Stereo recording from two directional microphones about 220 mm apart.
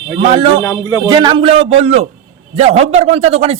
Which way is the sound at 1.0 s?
20° right (ahead or behind).